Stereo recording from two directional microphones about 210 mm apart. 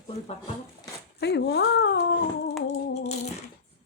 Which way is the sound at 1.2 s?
50° left (ahead or behind).